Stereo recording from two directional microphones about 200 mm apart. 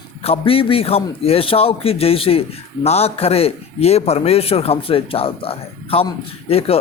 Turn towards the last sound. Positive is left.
turn(degrees=30)  # may be behind; listen again after turning